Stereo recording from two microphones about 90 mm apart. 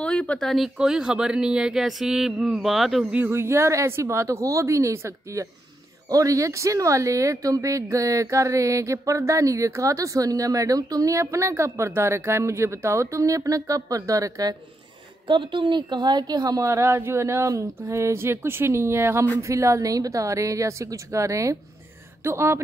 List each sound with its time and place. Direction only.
0.0 s speech: 10° left (ahead or behind)
0.7 s speech: 10° right (ahead or behind)
3.3 s speech: 30° right (ahead or behind)
15.2 s speech: 65° right (ahead or behind); by 22.6 s 30° right (ahead or behind)